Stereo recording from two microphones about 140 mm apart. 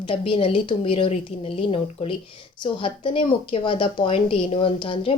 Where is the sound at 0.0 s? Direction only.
40° left (ahead or behind).